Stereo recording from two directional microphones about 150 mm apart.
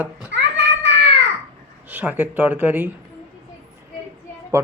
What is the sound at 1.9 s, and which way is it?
Speech, 10° right (ahead or behind).